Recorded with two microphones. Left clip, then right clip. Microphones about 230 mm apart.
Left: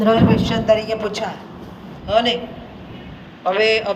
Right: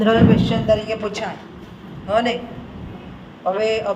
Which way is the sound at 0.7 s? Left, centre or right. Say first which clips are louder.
Left 3 dB; left.